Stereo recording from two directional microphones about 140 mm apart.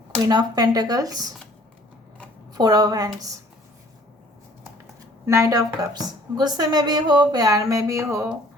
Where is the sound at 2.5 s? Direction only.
30° right (ahead or behind).